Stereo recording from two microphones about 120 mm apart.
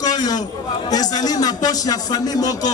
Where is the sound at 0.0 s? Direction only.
30° left (ahead or behind).